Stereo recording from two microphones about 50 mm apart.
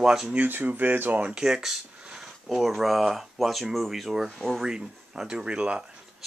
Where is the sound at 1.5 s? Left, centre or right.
Centre.